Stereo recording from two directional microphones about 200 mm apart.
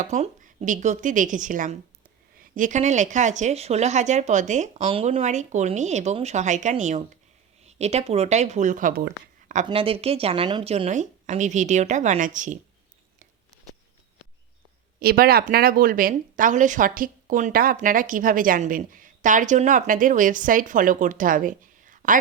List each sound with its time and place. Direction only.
0.0 s speech: 35° right (ahead or behind)
9.6 s speech: 25° right (ahead or behind)
14.9 s speech: 50° right (ahead or behind)